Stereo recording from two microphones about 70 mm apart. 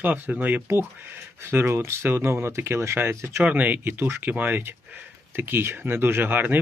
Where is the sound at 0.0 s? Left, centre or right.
Right.